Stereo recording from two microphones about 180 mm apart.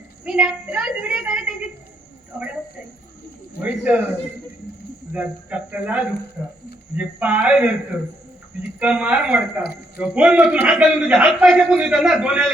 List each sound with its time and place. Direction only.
0.3 s a man's voice: 5° right (ahead or behind)
3.6 s speech: 5° right (ahead or behind)
5.1 s a man's voice: 10° right (ahead or behind)
8.8 s a man's voice: 5° right (ahead or behind)